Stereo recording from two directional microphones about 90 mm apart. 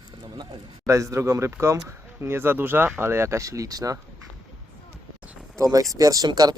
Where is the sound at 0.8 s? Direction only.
35° right (ahead or behind).